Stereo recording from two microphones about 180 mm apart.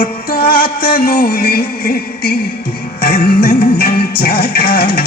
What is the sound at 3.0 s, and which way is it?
Music, 55° left (ahead or behind).